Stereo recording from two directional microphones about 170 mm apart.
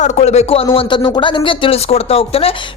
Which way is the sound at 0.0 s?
40° left (ahead or behind).